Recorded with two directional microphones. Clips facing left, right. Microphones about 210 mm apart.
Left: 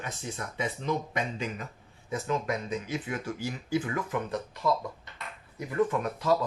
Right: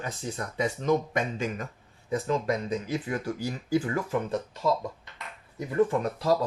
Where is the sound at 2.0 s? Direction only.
35° right (ahead or behind).